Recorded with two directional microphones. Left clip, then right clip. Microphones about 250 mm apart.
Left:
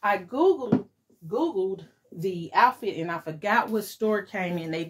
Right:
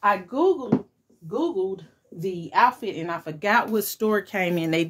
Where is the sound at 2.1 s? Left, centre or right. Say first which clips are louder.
Right 1 dB; centre.